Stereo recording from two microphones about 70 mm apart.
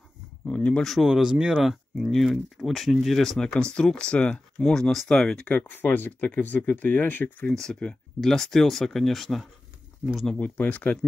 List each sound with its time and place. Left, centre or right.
0.5 s speech: centre
0.9 s speech: centre
5.5 s speech: left
7.4 s speech: centre
10.3 s speech: left